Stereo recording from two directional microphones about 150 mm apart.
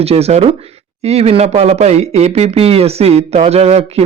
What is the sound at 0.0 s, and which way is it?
Speech, 45° right (ahead or behind).